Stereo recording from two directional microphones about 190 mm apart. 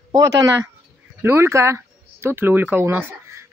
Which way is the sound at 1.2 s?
15° right (ahead or behind).